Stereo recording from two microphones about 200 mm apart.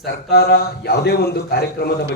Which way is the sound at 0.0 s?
50° left (ahead or behind).